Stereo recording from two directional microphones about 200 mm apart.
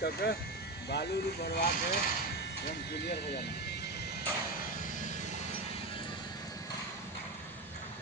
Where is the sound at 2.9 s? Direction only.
55° left (ahead or behind).